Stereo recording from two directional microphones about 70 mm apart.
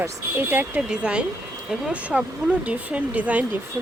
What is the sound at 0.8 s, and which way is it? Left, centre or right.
Speech, centre.